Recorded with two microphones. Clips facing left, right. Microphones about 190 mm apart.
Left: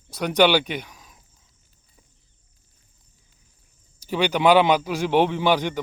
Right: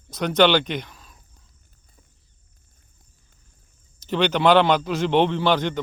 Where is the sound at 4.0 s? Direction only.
10° left (ahead or behind).